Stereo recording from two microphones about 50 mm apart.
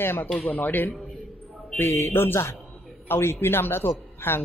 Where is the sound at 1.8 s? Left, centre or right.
Left.